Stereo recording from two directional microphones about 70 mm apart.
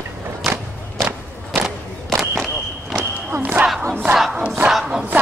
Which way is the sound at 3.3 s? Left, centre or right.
Right.